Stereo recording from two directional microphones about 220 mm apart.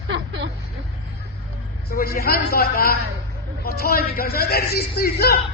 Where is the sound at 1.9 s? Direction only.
40° left (ahead or behind).